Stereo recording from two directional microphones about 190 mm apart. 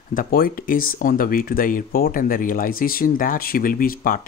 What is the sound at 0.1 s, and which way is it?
Speech, 50° left (ahead or behind).